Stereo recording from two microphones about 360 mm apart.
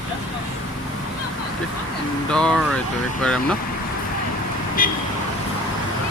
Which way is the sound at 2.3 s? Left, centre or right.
Centre.